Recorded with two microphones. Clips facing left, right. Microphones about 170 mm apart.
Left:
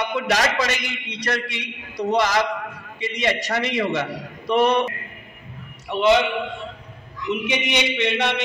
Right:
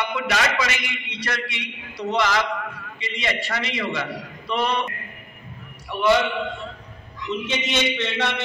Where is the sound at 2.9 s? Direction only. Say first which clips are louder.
Left 5 dB; 50° left (ahead or behind).